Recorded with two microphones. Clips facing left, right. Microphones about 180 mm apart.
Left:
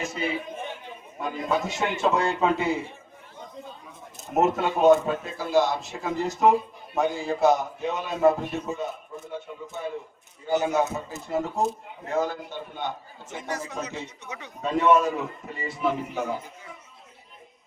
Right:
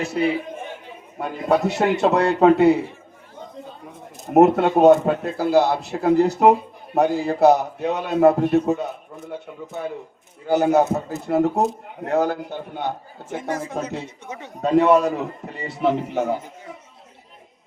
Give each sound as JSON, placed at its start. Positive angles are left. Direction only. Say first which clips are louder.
{"t": 0.0, "sound": "a man's voice", "louder": "right 8 dB", "side_deg": -65}
{"t": 4.3, "sound": "a man's voice", "louder": "right 9 dB", "side_deg": -65}
{"t": 10.5, "sound": "speech", "louder": "right 7 dB", "side_deg": -65}
{"t": 13.4, "sound": "speech", "louder": "right 5 dB", "side_deg": -50}
{"t": 14.6, "sound": "a man's voice", "louder": "right 5 dB", "side_deg": -70}